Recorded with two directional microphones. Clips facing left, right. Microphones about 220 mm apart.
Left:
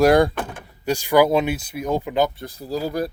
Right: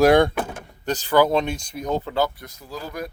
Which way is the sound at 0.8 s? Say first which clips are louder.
Left 2 dB; 10° left (ahead or behind).